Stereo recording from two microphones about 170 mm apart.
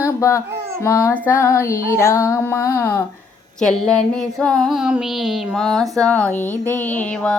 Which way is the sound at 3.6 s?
5° left (ahead or behind).